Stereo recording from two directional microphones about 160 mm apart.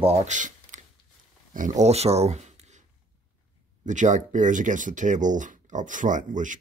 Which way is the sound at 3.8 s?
50° right (ahead or behind).